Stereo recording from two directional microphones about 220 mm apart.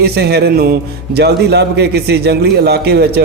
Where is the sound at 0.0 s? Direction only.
45° right (ahead or behind).